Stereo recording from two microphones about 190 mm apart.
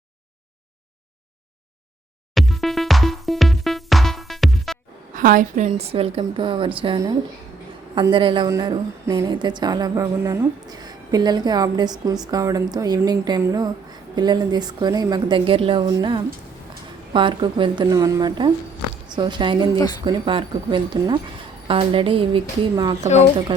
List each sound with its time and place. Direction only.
2.3 s music: centre (ahead or behind)
5.1 s a woman's voice: 45° right (ahead or behind); by 19.6 s 25° right (ahead or behind)
19.7 s speech: 20° left (ahead or behind)
20.1 s a woman's voice: 25° right (ahead or behind)
23.0 s speech: 35° left (ahead or behind)
23.5 s a woman's voice: 25° right (ahead or behind)